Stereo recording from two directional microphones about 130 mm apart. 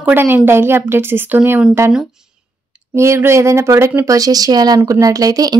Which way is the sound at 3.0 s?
20° right (ahead or behind).